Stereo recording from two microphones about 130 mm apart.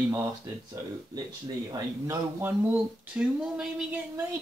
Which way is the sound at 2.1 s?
15° right (ahead or behind).